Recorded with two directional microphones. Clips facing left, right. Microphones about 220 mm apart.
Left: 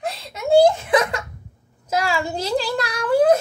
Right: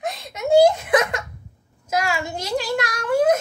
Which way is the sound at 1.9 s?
35° left (ahead or behind).